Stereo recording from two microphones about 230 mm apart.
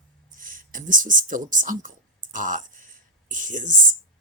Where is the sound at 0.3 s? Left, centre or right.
Right.